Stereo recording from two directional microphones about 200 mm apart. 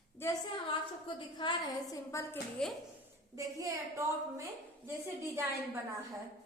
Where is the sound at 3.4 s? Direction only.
15° right (ahead or behind).